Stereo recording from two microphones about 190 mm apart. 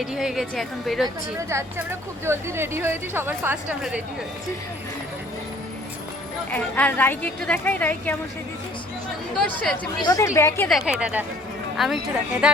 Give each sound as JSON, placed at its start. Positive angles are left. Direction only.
{"t": 0.0, "sound": "a woman's voice", "side_deg": -5}
{"t": 1.5, "sound": "speech", "side_deg": -15}
{"t": 6.5, "sound": "a woman's voice", "side_deg": 10}
{"t": 9.3, "sound": "a woman's voice", "side_deg": 5}
{"t": 10.0, "sound": "a woman's voice", "side_deg": 20}
{"t": 10.7, "sound": "a woman's voice", "side_deg": -5}